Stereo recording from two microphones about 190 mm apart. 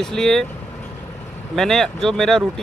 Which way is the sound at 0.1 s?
Centre (ahead or behind).